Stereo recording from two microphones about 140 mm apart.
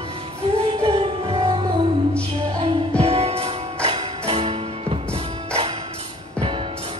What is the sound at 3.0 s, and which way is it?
Music, 45° right (ahead or behind).